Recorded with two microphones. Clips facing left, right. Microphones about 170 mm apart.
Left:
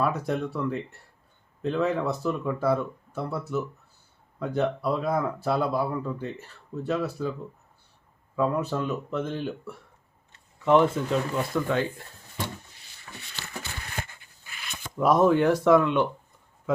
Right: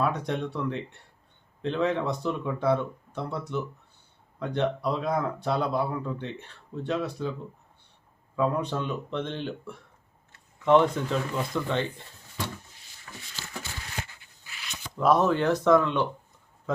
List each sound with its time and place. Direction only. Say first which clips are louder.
0.0 s speech: left 1 dB; 5° left (ahead or behind)
8.4 s speech: left 1 dB; 5° left (ahead or behind)
13.1 s a sound: left 1 dB; 65° left (ahead or behind)
14.9 s speech: left 2 dB; 10° left (ahead or behind)